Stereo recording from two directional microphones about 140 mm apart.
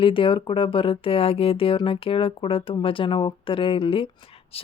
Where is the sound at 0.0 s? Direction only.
40° left (ahead or behind).